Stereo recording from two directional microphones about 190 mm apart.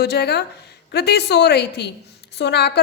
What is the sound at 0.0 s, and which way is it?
A woman's voice, 60° left (ahead or behind).